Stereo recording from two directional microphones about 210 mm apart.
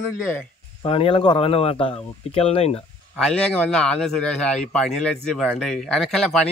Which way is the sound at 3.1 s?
5° left (ahead or behind).